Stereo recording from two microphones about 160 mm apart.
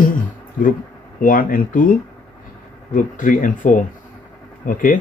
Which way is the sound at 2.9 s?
55° left (ahead or behind).